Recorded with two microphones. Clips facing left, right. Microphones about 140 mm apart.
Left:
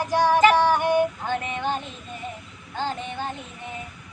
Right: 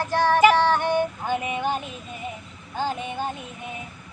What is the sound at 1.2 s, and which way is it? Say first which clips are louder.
Music: right 1 dB; 10° right (ahead or behind).